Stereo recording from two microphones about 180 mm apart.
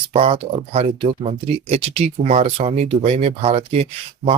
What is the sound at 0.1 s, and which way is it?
Speech, 35° right (ahead or behind).